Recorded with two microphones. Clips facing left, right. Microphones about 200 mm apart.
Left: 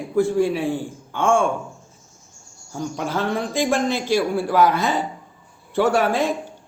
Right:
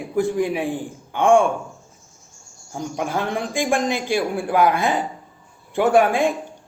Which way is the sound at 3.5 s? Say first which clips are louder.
Even; 50° right (ahead or behind).